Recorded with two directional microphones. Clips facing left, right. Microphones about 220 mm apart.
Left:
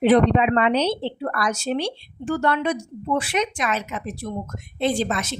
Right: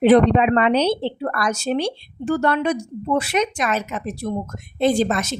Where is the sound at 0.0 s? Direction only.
50° right (ahead or behind).